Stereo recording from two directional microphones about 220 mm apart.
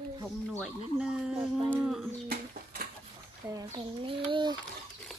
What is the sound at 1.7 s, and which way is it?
Music, centre (ahead or behind).